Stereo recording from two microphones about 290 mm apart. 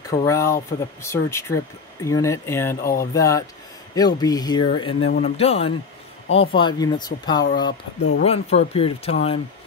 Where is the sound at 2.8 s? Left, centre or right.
Left.